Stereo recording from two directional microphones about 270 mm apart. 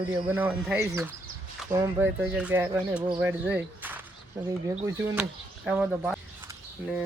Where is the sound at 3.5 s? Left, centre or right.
Centre.